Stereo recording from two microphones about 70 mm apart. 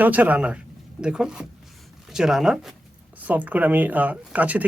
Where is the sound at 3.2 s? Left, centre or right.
Right.